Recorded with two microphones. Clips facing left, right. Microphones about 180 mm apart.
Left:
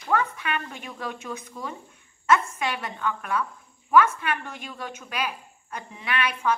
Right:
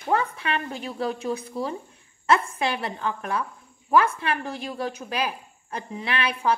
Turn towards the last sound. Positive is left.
turn(degrees=-30)  # may be behind; listen again after turning